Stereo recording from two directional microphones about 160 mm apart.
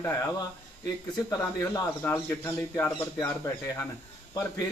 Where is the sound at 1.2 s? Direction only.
20° left (ahead or behind).